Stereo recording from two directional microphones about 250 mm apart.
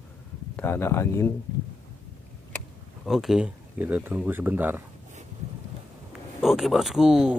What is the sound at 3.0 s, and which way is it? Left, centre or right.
Speech, centre.